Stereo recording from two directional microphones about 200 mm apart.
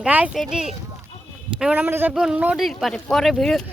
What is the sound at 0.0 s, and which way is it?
A man's voice, 5° right (ahead or behind).